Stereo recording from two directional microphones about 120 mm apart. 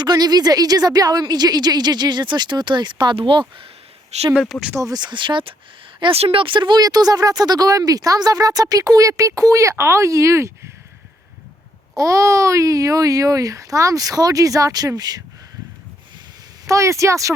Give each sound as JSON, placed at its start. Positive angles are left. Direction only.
{"t": 0.0, "sound": "a woman's voice", "side_deg": -35}
{"t": 4.1, "sound": "speech", "side_deg": -65}
{"t": 4.7, "sound": "a woman's voice", "side_deg": -30}
{"t": 11.9, "sound": "speech", "side_deg": -25}
{"t": 16.6, "sound": "speech", "side_deg": -25}